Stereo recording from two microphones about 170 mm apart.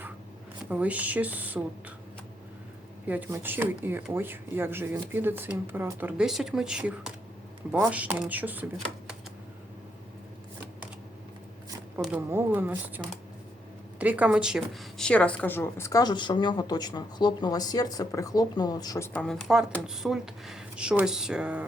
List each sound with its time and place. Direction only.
0.7 s speech: 10° right (ahead or behind)
3.1 s speech: 15° right (ahead or behind)
12.0 s speech: 10° right (ahead or behind)
14.0 s a woman's voice: 10° right (ahead or behind)